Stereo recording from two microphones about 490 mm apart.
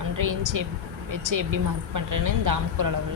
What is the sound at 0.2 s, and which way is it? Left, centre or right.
A woman's voice, right.